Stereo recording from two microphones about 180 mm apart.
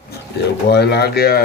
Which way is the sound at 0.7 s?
65° left (ahead or behind).